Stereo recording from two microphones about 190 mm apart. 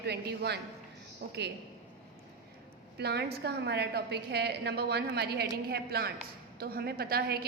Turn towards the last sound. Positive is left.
turn(degrees=-55)  # may be behind; listen again after turning